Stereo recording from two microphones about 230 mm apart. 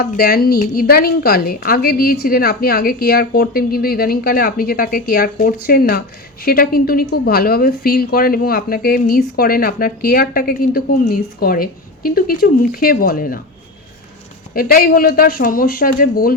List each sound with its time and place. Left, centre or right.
0.0 s a woman's voice: left
14.5 s a woman's voice: left